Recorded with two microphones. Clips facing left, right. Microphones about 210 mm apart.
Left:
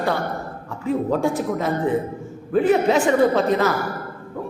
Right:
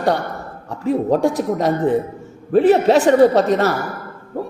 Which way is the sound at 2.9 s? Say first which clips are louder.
Right 5 dB; 35° right (ahead or behind).